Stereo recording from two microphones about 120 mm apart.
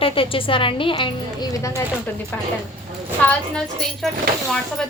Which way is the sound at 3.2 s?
10° left (ahead or behind).